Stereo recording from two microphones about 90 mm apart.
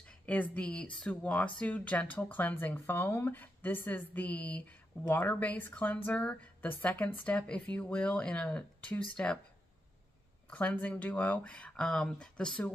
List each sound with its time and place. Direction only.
0.3 s speech: 15° left (ahead or behind)
10.5 s speech: 15° left (ahead or behind)